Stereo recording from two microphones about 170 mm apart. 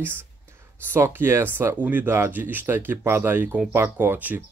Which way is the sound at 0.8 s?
15° right (ahead or behind).